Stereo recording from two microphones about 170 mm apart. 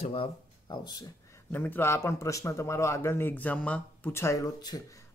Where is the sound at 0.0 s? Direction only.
35° left (ahead or behind).